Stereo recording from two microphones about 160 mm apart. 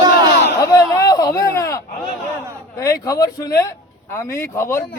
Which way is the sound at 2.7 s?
20° left (ahead or behind).